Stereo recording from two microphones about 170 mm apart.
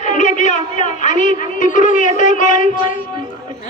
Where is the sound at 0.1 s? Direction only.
45° left (ahead or behind).